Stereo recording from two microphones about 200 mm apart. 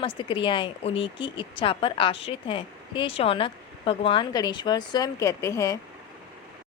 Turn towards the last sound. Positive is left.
turn(degrees=15)  # may be behind; listen again after turning